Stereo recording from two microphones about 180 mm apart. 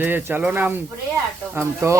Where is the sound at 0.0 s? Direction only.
10° right (ahead or behind).